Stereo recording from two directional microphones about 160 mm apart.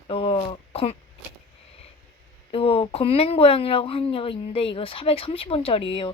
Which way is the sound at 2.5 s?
35° left (ahead or behind).